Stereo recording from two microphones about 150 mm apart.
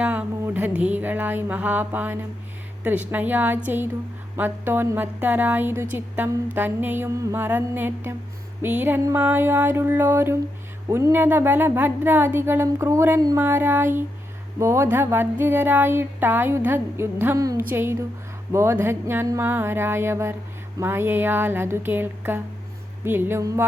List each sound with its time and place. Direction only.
0.0 s a woman's voice: 10° right (ahead or behind)